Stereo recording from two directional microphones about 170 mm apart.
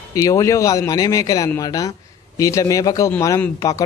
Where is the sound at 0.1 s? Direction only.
20° left (ahead or behind).